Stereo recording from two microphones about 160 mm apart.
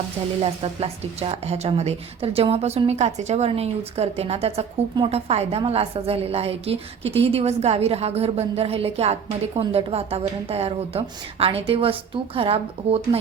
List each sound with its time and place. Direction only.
0.6 s a woman's voice: 35° right (ahead or behind)